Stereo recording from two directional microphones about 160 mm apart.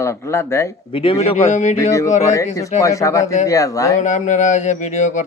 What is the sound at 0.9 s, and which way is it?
Speech, 35° left (ahead or behind).